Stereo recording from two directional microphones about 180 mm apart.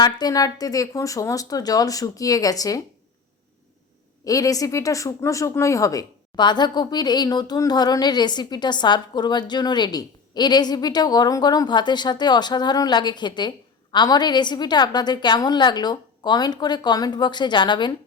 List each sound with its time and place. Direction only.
0.0 s a woman's voice: 20° left (ahead or behind)
4.3 s a woman's voice: 20° left (ahead or behind)